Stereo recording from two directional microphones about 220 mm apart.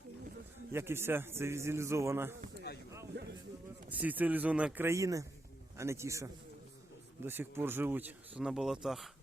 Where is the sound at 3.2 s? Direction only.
50° right (ahead or behind).